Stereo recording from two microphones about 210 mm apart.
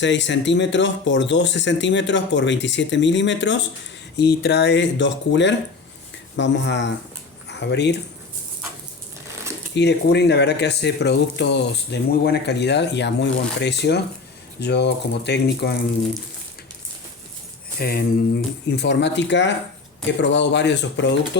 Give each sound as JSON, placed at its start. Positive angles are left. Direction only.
{"t": 0.0, "sound": "speech", "side_deg": 60}
{"t": 9.7, "sound": "speech", "side_deg": 55}
{"t": 17.7, "sound": "speech", "side_deg": 45}